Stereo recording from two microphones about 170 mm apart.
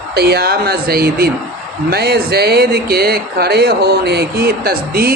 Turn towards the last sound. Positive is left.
turn(degrees=-60)  # may be behind; listen again after turning